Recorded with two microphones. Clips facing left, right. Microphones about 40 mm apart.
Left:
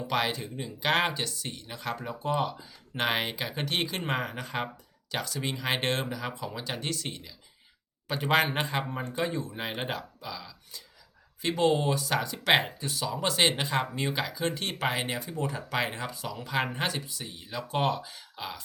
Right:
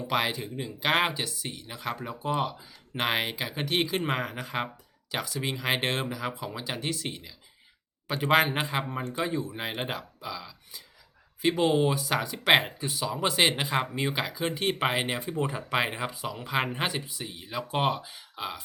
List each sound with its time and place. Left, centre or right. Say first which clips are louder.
0.1 s speech: right 1 dB; centre